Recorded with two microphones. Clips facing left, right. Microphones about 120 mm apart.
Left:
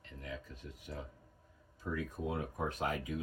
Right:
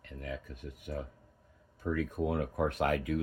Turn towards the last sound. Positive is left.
turn(degrees=-65)  # may be behind; listen again after turning